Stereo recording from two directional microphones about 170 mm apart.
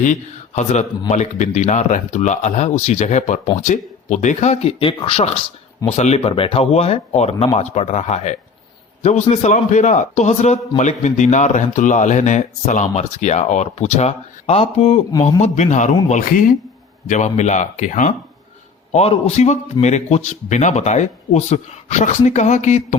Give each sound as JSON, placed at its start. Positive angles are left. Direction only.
{"t": 0.0, "sound": "speech", "side_deg": 45}